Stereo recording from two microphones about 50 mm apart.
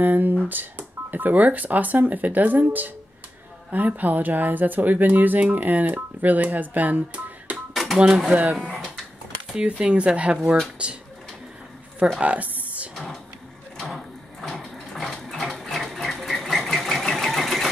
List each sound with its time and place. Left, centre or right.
0.0 s speech: right
7.7 s speech: centre
8.7 s a sound: centre
9.6 s speech: centre
12.2 s speech: right
13.7 s a sound: centre
15.2 s sewing machine: centre